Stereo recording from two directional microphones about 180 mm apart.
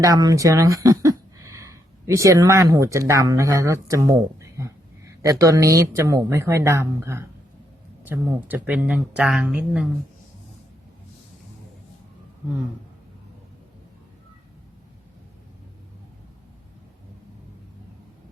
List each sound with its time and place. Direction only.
0.0 s speech: 20° right (ahead or behind); by 9.8 s 5° right (ahead or behind)